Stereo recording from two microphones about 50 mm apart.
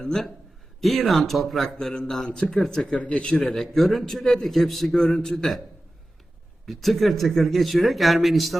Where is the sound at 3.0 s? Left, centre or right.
Left.